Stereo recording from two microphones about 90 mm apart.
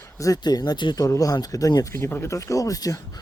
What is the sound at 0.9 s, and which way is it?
Speech, 40° left (ahead or behind).